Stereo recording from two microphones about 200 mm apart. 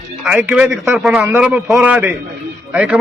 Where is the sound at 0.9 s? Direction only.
Centre (ahead or behind).